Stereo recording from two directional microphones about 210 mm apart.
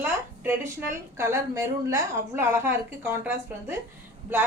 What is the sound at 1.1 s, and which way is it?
A woman's voice, 10° right (ahead or behind).